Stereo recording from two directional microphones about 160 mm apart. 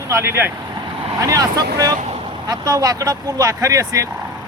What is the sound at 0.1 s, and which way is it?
Speech, 15° right (ahead or behind).